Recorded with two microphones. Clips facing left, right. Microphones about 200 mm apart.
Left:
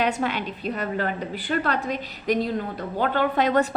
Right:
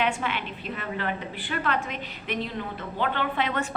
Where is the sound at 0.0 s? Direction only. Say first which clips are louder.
Left 3 dB; 40° left (ahead or behind).